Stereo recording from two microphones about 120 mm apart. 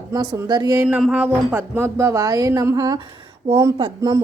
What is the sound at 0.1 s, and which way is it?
Speech, 35° right (ahead or behind).